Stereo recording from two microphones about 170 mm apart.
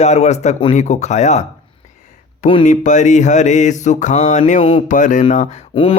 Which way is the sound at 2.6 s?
45° left (ahead or behind).